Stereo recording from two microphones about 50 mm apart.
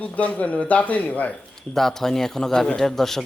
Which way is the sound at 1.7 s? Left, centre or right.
Centre.